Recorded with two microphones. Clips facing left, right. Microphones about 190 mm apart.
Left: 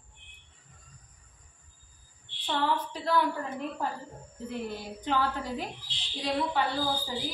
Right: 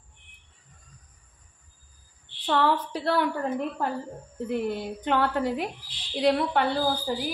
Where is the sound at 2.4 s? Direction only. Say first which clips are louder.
Right 5 dB; 70° right (ahead or behind).